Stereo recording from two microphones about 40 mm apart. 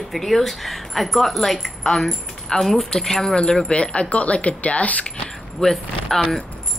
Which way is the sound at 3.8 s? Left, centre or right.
Left.